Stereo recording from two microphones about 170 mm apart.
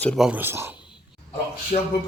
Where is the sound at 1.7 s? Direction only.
45° left (ahead or behind).